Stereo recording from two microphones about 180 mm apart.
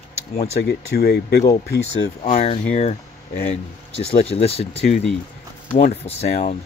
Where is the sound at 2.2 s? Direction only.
45° left (ahead or behind).